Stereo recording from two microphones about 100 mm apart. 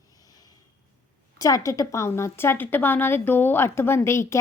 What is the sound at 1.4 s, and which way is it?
A woman's voice, 35° left (ahead or behind).